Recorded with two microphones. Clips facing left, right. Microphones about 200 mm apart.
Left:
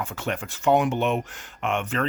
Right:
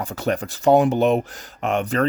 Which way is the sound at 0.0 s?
35° right (ahead or behind).